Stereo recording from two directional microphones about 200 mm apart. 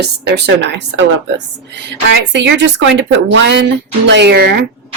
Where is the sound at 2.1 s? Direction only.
60° right (ahead or behind).